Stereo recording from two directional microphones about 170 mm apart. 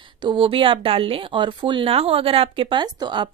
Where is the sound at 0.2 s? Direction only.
30° right (ahead or behind).